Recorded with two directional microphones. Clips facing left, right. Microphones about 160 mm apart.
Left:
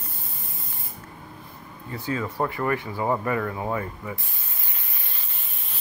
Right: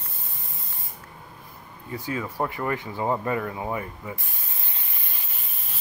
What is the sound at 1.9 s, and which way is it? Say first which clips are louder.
Speech: left 2 dB; 10° right (ahead or behind).